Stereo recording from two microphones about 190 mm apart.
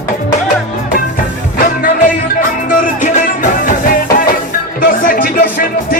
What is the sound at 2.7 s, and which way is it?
Music, 45° left (ahead or behind).